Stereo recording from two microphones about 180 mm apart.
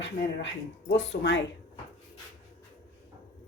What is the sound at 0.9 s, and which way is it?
Speech, 80° left.